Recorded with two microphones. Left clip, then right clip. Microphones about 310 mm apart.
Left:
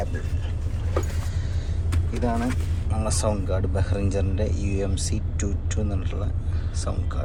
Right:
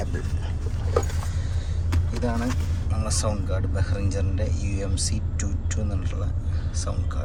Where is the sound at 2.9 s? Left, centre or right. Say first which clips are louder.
Left 3 dB; centre.